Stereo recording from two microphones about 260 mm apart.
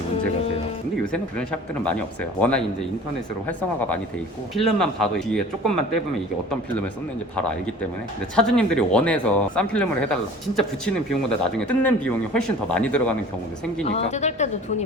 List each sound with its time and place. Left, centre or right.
1.1 s speech: centre
4.5 s speech: centre
8.4 s speech: centre
13.8 s speech: left